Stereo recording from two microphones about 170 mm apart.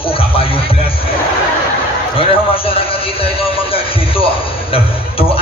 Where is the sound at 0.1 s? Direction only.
35° left (ahead or behind).